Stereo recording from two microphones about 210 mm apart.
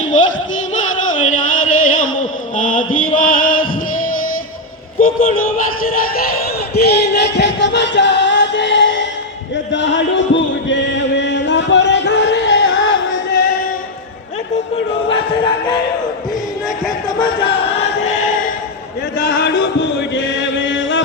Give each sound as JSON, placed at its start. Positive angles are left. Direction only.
{"t": 1.3, "sound": "a sound", "side_deg": 40}
{"t": 2.6, "sound": "music", "side_deg": 40}
{"t": 4.9, "sound": "a sound", "side_deg": 40}
{"t": 9.7, "sound": "chant", "side_deg": 60}
{"t": 17.2, "sound": "music", "side_deg": 25}
{"t": 19.1, "sound": "chant", "side_deg": 60}